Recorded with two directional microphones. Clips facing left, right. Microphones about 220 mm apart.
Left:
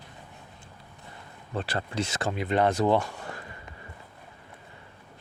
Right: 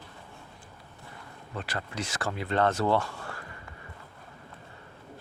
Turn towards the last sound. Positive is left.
turn(degrees=20)  # may be behind; listen again after turning